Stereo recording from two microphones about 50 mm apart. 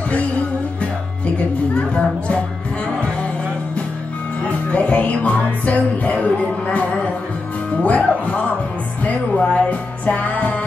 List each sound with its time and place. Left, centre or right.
1.8 s music: left
4.6 s music: left
7.8 s speech: left
9.0 s music: left